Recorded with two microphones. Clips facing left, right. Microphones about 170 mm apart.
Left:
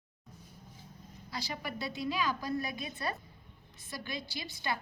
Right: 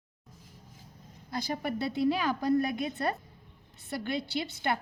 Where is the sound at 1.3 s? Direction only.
55° right (ahead or behind).